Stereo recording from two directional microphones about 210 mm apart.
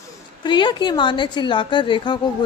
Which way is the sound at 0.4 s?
20° left (ahead or behind).